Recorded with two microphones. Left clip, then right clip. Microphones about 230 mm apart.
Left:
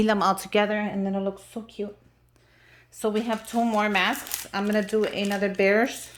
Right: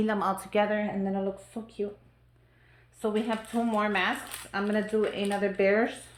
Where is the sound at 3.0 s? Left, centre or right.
Left.